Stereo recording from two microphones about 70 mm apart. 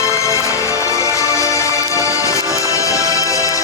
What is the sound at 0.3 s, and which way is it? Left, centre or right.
Music, left.